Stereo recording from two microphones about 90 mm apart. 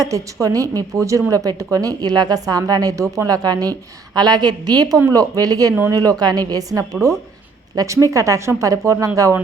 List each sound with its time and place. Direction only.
0.0 s a woman's voice: 40° right (ahead or behind)